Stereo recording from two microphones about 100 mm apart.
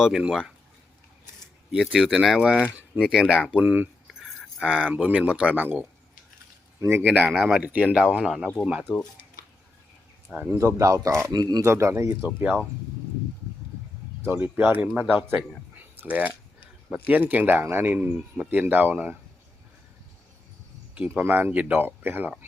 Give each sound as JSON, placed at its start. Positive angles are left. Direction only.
{"t": 0.0, "sound": "speech", "side_deg": -5}
{"t": 1.7, "sound": "speech", "side_deg": -5}
{"t": 4.0, "sound": "keys jangling", "side_deg": 0}
{"t": 4.7, "sound": "speech", "side_deg": -10}
{"t": 6.7, "sound": "speech", "side_deg": -30}
{"t": 7.0, "sound": "speech", "side_deg": -15}
{"t": 7.3, "sound": "speech", "side_deg": 0}
{"t": 8.8, "sound": "speech", "side_deg": 10}
{"t": 10.3, "sound": "speech", "side_deg": -20}
{"t": 11.3, "sound": "speech", "side_deg": -40}
{"t": 11.6, "sound": "speech", "side_deg": -30}
{"t": 14.3, "sound": "speech", "side_deg": -20}
{"t": 21.2, "sound": "speech", "side_deg": -20}